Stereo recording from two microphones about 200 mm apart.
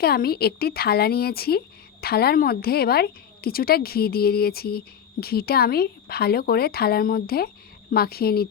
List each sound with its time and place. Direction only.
0.0 s speech: 50° left (ahead or behind)